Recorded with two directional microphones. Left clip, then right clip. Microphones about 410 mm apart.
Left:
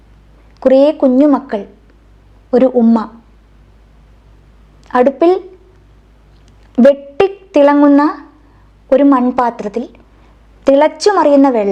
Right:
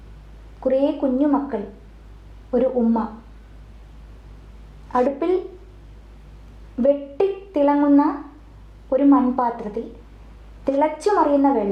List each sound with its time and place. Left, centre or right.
0.6 s a woman's voice: left
4.9 s a woman's voice: left
7.2 s a sound: left
8.9 s a woman's voice: left